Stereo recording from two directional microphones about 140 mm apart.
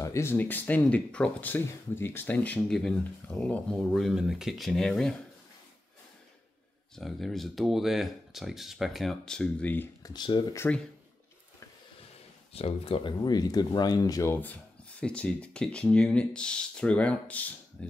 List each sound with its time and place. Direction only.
0.0 s speech: 20° left (ahead or behind)
3.9 s speech: centre (ahead or behind)
7.0 s speech: centre (ahead or behind)
10.0 s speech: 30° left (ahead or behind)
12.5 s speech: 45° left (ahead or behind)
13.2 s speech: 30° left (ahead or behind); by 17.5 s 10° left (ahead or behind)
17.8 s typewriter: 10° left (ahead or behind)